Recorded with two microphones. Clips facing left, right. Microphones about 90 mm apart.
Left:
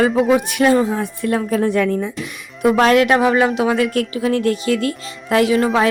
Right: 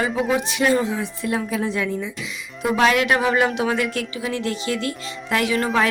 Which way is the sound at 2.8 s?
40° left (ahead or behind).